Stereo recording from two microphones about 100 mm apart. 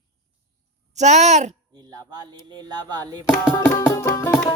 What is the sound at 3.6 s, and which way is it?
Music, 30° left (ahead or behind).